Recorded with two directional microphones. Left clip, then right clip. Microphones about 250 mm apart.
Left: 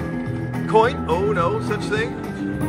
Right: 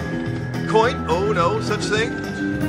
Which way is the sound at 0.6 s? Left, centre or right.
Centre.